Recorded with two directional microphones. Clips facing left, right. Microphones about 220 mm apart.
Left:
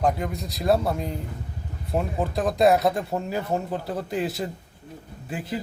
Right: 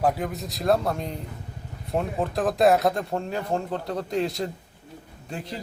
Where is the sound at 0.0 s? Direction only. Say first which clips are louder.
Even; centre (ahead or behind).